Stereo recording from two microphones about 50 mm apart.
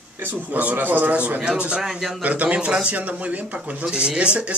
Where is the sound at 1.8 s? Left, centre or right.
Centre.